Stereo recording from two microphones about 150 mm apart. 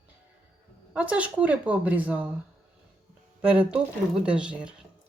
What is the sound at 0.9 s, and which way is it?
Speech, 10° right (ahead or behind).